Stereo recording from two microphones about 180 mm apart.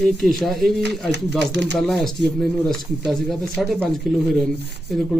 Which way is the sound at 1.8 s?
Centre (ahead or behind).